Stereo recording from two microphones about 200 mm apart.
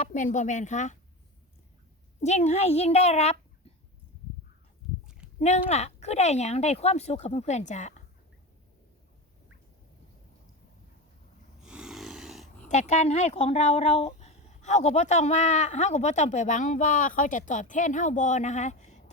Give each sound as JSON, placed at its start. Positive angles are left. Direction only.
{"t": 0.0, "sound": "speech", "side_deg": 40}
{"t": 2.2, "sound": "speech", "side_deg": 35}
{"t": 5.0, "sound": "a sound", "side_deg": -5}
{"t": 5.4, "sound": "speech", "side_deg": 35}
{"t": 11.6, "sound": "a sound", "side_deg": -5}
{"t": 12.9, "sound": "speech", "side_deg": 35}